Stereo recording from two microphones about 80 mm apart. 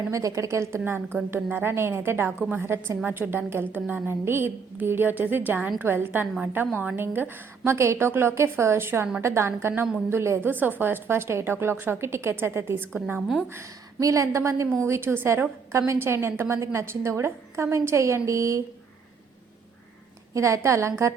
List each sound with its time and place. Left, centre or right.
0.1 s a woman's voice: right
13.5 s a woman's voice: right
20.3 s a woman's voice: right